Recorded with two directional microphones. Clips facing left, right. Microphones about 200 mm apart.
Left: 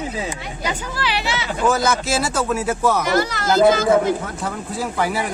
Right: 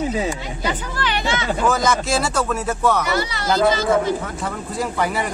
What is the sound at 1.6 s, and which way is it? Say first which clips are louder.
Speech: left 2 dB; centre (ahead or behind).